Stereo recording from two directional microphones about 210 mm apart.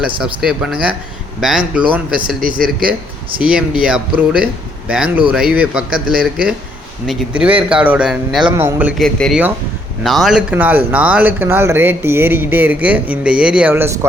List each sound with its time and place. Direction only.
0.4 s speech: 5° right (ahead or behind)
2.2 s speech: 40° right (ahead or behind)
3.4 s speech: 5° right (ahead or behind)